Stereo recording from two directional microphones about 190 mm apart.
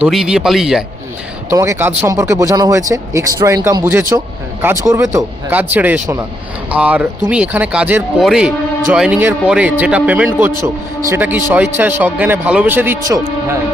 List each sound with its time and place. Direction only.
0.0 s speech: centre (ahead or behind)
1.5 s a man's voice: 15° right (ahead or behind)